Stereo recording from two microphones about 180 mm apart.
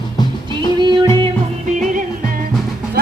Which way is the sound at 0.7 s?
25° right (ahead or behind).